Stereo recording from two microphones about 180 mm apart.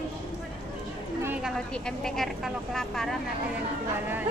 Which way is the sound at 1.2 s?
Centre (ahead or behind).